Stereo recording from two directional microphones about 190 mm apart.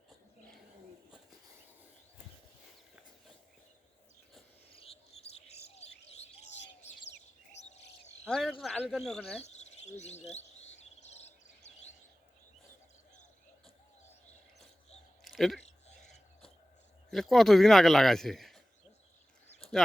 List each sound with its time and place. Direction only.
4.7 s chirp: 30° left (ahead or behind)
7.6 s bird: 35° left (ahead or behind)
8.2 s speech: centre (ahead or behind)
9.4 s bird vocalization: 35° left (ahead or behind)
15.2 s a sound: centre (ahead or behind)
17.1 s speech: centre (ahead or behind)